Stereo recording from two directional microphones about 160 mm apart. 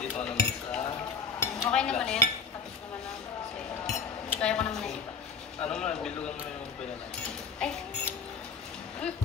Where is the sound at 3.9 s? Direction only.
5° left (ahead or behind).